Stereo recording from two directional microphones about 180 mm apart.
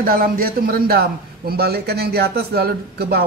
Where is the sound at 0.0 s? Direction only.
55° right (ahead or behind).